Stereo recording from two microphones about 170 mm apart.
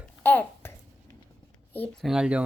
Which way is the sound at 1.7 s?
10° left (ahead or behind).